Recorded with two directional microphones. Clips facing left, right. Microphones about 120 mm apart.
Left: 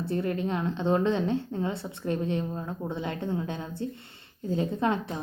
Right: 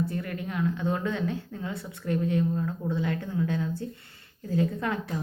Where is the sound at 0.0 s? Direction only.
30° left (ahead or behind).